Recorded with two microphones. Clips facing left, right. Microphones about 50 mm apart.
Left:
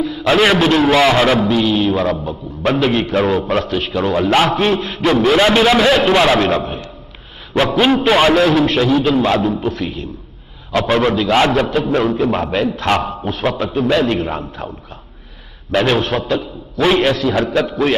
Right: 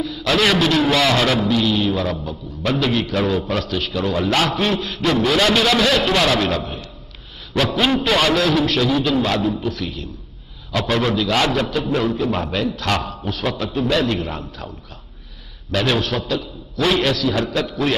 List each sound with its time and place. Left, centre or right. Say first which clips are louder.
0.0 s a man's voice: left 5 dB; left
15.7 s a man's voice: left 5 dB; left